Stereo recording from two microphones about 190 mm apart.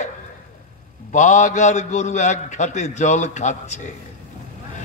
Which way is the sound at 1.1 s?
40° left (ahead or behind).